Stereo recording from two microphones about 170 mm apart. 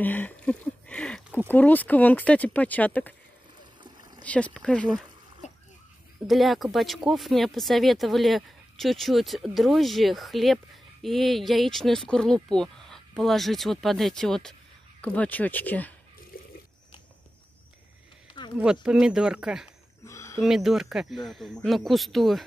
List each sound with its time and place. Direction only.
0.0 s speech: 10° left (ahead or behind)
4.2 s a sound: 10° left (ahead or behind)
4.6 s speech: 5° left (ahead or behind)
6.2 s speech: centre (ahead or behind)
18.6 s speech: 5° right (ahead or behind)
20.1 s a sound: 15° left (ahead or behind)
20.3 s speech: centre (ahead or behind)